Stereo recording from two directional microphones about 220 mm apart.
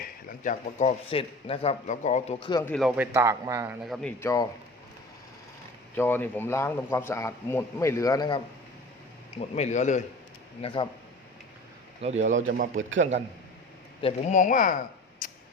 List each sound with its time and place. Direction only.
0.0 s speech: 40° left (ahead or behind)
2.6 s speech: 5° left (ahead or behind)
2.9 s a man's voice: 10° right (ahead or behind)
3.8 s speech: centre (ahead or behind)
4.2 s speech: 15° left (ahead or behind)
5.9 s speech: 10° left (ahead or behind)
9.6 s speech: 30° left (ahead or behind)
12.0 s a man's voice: 30° right (ahead or behind)
14.0 s speech: 30° left (ahead or behind)
15.2 s a sound: 40° left (ahead or behind)